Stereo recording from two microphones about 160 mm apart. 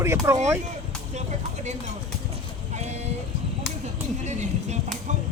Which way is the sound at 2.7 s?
45° right (ahead or behind).